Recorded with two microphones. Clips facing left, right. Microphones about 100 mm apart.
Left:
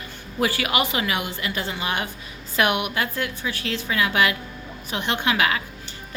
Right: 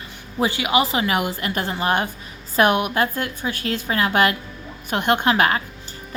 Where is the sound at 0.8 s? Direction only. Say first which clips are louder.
Right 6 dB; 30° right (ahead or behind).